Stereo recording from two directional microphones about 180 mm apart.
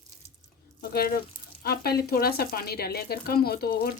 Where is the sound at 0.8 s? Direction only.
60° left (ahead or behind).